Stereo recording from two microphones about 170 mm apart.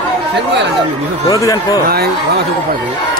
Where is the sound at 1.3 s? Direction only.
20° left (ahead or behind).